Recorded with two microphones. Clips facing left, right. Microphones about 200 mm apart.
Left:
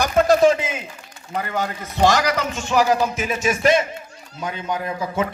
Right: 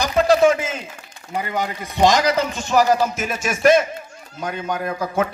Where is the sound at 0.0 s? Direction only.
50° left (ahead or behind).